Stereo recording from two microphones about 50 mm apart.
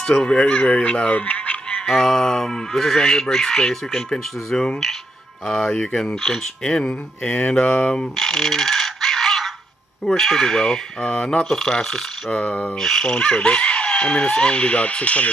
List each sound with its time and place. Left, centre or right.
0.0 s speech: centre
1.8 s speech: centre
7.4 s speech: left
7.9 s coin: centre
10.0 s speech: centre
12.3 s speech: left
12.7 s speech: centre
13.0 s speech: centre